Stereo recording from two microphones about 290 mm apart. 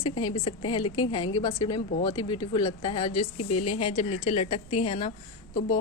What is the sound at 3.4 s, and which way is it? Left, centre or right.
Speech, left.